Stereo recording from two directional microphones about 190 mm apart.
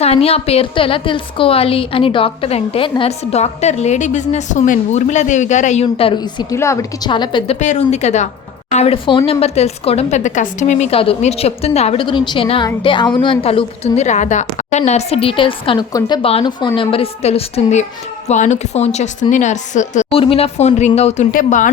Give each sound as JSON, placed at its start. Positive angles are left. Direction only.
{"t": 0.0, "sound": "a woman's voice", "side_deg": 30}
{"t": 6.5, "sound": "a woman's voice", "side_deg": 15}
{"t": 7.6, "sound": "a woman's voice", "side_deg": 40}